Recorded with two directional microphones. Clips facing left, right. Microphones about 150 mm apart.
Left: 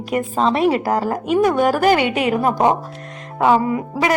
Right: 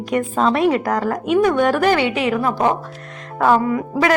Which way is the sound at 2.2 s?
35° left (ahead or behind).